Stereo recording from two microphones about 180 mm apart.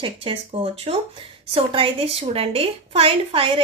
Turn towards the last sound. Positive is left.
turn(degrees=-30)  # may be behind; listen again after turning